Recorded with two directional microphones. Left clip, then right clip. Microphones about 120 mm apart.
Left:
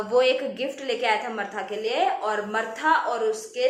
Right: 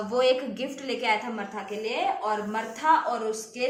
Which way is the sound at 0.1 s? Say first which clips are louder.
Left 3 dB; 30° right (ahead or behind).